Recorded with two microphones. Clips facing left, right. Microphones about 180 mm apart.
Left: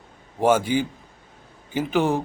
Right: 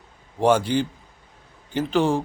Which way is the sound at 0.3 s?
5° left (ahead or behind).